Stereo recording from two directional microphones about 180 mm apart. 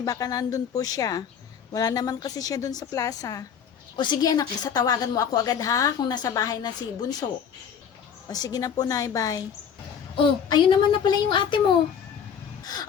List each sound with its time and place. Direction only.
0.0 s a woman's voice: 20° left (ahead or behind)
8.3 s a woman's voice: 20° left (ahead or behind)